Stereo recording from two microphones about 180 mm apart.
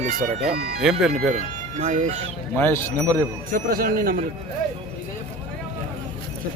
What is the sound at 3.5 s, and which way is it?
Speech, 55° right (ahead or behind).